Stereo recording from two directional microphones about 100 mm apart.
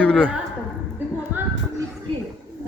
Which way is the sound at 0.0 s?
10° left (ahead or behind).